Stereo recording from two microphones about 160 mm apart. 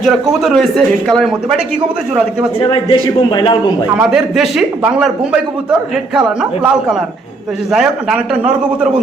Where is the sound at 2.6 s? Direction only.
35° left (ahead or behind).